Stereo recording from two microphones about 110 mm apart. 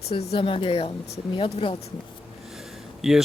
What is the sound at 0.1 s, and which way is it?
Speech, 65° left (ahead or behind).